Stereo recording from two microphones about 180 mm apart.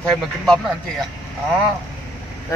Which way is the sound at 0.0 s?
Centre (ahead or behind).